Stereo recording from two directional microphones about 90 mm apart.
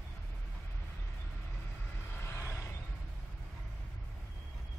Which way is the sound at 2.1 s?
30° left (ahead or behind).